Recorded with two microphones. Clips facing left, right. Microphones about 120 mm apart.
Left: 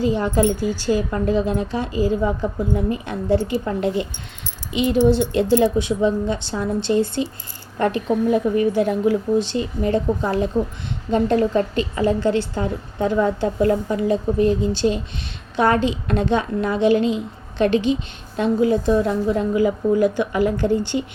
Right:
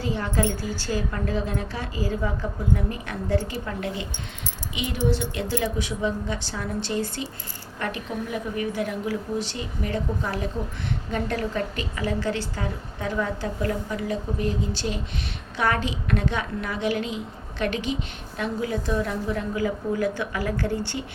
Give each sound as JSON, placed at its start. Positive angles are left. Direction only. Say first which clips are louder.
{"t": 0.0, "sound": "a woman's voice", "louder": "left 7 dB", "side_deg": 20}
{"t": 4.9, "sound": "a woman's voice", "louder": "left 9 dB", "side_deg": 25}